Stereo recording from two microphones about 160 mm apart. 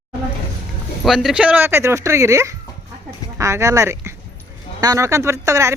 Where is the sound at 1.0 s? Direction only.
Centre (ahead or behind).